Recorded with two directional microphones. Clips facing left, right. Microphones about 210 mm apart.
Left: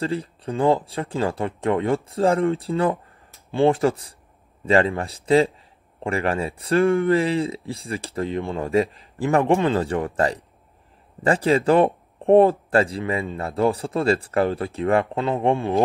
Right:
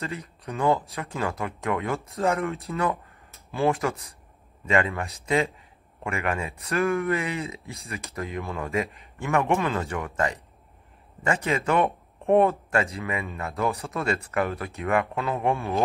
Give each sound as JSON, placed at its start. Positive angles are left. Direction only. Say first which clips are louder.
{"t": 0.0, "sound": "speech", "louder": "left 8 dB", "side_deg": 30}